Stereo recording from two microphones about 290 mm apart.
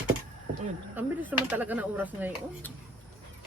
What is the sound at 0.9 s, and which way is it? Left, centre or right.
Speech, centre.